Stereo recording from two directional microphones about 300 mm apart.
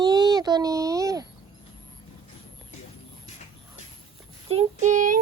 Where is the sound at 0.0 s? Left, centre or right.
Centre.